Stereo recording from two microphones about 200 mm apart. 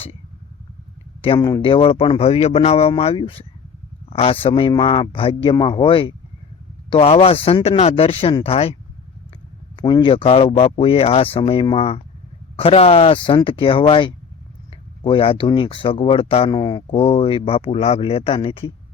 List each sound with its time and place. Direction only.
1.2 s speech: 25° left (ahead or behind)
9.7 s speech: 20° left (ahead or behind)